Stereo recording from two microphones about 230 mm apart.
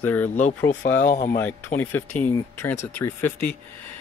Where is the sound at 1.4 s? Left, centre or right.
Centre.